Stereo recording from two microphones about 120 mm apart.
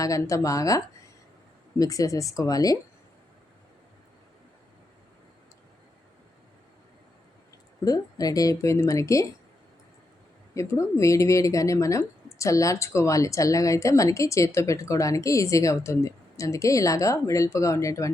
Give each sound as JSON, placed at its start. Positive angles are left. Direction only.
{"t": 0.0, "sound": "speech", "side_deg": 25}
{"t": 1.8, "sound": "speech", "side_deg": 30}
{"t": 7.9, "sound": "speech", "side_deg": 30}
{"t": 10.5, "sound": "speech", "side_deg": 25}